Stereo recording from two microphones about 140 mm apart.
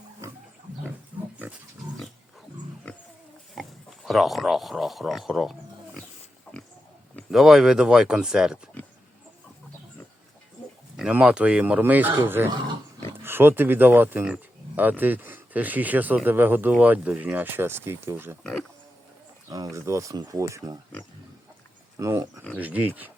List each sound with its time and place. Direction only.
2.8 s a sound: 10° left (ahead or behind)
3.5 s speech: centre (ahead or behind)
7.3 s speech: centre (ahead or behind)
10.9 s speech: 5° right (ahead or behind)
19.5 s speech: 25° right (ahead or behind)
21.9 s speech: 20° right (ahead or behind)